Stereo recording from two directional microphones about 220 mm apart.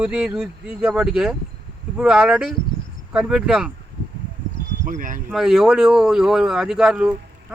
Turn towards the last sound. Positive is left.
turn(degrees=0)  # may be behind; listen again after turning